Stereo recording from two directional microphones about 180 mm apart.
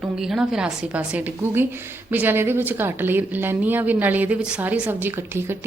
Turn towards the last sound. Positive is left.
turn(degrees=-15)  # may be behind; listen again after turning